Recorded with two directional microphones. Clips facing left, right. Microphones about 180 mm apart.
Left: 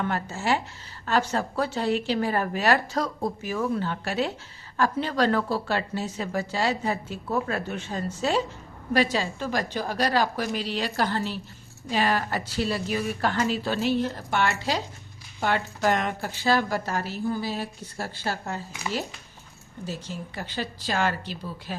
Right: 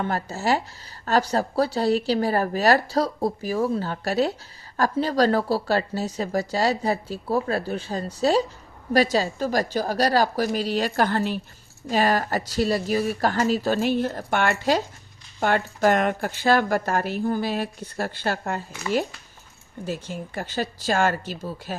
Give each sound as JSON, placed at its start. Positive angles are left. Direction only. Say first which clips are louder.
{"t": 0.0, "sound": "a woman's voice", "louder": "right 2 dB", "side_deg": -40}
{"t": 19.8, "sound": "a woman's voice", "louder": "right 4 dB", "side_deg": -55}